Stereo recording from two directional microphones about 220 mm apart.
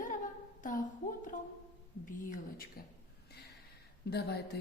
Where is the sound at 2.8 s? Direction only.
40° left (ahead or behind).